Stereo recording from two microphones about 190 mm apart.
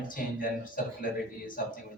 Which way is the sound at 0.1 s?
45° left (ahead or behind).